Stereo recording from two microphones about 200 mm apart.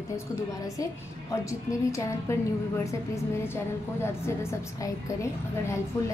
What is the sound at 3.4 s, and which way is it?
A woman's voice, 10° left (ahead or behind).